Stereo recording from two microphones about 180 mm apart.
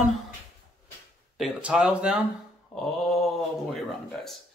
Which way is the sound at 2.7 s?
5° left (ahead or behind).